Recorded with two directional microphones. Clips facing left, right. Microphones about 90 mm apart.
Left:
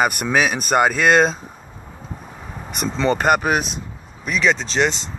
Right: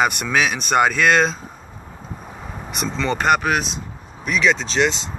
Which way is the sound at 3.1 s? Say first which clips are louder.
Right 2 dB; 10° left (ahead or behind).